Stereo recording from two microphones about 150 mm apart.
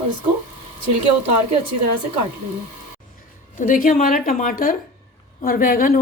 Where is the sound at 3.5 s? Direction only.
60° left (ahead or behind).